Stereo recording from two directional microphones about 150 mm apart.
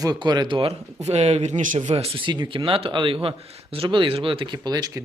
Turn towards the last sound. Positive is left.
turn(degrees=-25)  # may be behind; listen again after turning